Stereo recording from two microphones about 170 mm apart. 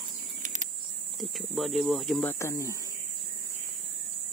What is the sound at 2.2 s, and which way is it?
Speech, 15° left (ahead or behind).